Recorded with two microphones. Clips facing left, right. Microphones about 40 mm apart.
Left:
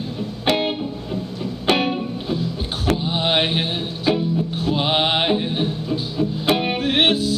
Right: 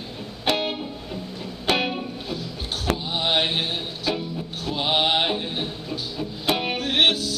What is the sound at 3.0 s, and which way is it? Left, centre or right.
Music, left.